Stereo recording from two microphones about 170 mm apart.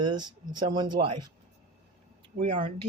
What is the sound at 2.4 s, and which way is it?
Speech, 30° right (ahead or behind).